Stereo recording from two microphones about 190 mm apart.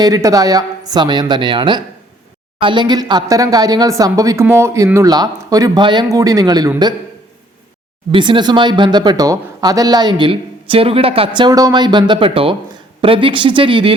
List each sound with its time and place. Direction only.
0.0 s speech: 15° right (ahead or behind)
8.1 s speech: 25° right (ahead or behind)